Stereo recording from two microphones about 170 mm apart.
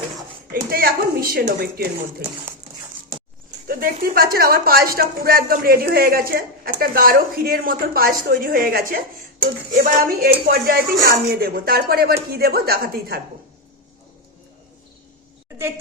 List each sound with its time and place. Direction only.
0.5 s speech: 60° right (ahead or behind)
3.7 s speech: 60° right (ahead or behind)